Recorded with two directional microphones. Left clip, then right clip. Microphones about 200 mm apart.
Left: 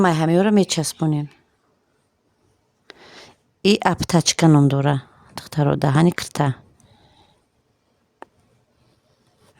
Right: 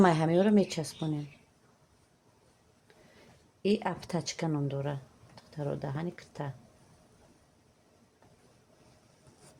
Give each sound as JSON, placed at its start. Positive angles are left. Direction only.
{"t": 0.0, "sound": "speech", "side_deg": 35}
{"t": 2.8, "sound": "speech", "side_deg": 55}